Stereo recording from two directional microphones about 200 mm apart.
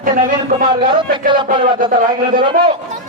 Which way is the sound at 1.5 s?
25° right (ahead or behind).